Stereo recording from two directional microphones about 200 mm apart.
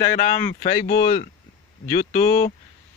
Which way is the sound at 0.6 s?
40° left (ahead or behind).